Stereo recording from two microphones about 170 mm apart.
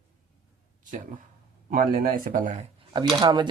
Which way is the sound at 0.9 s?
50° right (ahead or behind).